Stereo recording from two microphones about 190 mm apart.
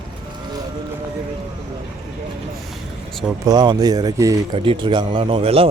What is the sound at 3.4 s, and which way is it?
Speech, 20° right (ahead or behind).